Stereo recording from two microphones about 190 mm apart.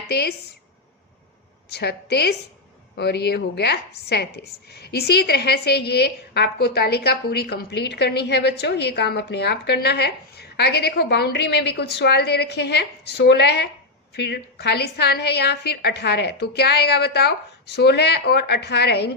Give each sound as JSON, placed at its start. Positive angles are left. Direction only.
{"t": 0.1, "sound": "a woman's voice", "side_deg": 60}
{"t": 1.7, "sound": "a woman's voice", "side_deg": 60}